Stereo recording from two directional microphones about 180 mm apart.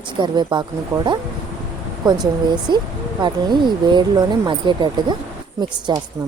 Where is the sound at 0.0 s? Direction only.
25° right (ahead or behind).